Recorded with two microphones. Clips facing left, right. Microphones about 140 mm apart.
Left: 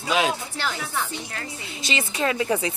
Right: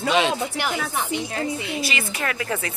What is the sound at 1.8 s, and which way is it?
Speech, 25° left (ahead or behind).